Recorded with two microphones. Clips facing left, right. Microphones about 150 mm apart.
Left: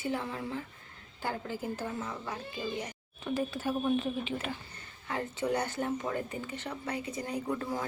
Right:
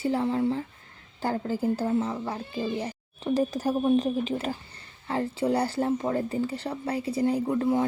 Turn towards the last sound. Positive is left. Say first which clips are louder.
# right 9 dB
turn(degrees=-25)  # may be behind; listen again after turning